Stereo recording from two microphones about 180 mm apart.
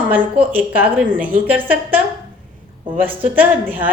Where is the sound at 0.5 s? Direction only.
10° right (ahead or behind).